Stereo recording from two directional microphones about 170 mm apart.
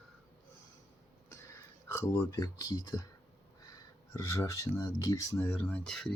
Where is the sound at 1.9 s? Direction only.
15° left (ahead or behind).